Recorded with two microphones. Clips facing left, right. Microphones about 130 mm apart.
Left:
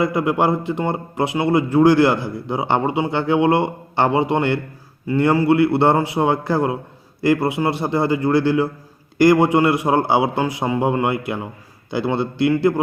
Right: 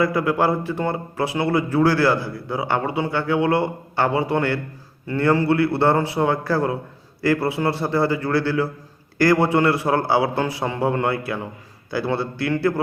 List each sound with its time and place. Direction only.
0.0 s a man's voice: 20° left (ahead or behind)